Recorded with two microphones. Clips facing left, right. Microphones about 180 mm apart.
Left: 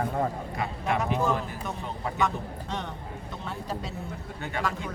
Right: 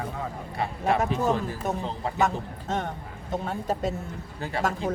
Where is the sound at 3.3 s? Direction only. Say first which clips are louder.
Right 7 dB; 45° right (ahead or behind).